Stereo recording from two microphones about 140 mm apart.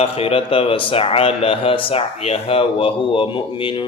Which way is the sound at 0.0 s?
45° left (ahead or behind).